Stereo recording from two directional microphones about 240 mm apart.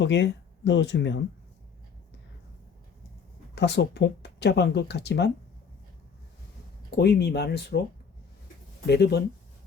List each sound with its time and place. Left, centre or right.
0.0 s speech: left
3.5 s speech: left
6.9 s speech: left
8.9 s speech: left